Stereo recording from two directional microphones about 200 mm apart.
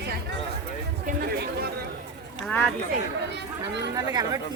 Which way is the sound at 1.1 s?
50° right (ahead or behind).